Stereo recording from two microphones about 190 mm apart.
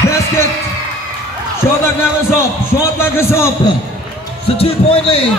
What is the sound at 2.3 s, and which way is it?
A man's voice, 15° left (ahead or behind).